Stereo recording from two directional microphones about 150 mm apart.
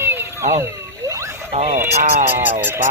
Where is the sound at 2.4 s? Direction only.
10° right (ahead or behind).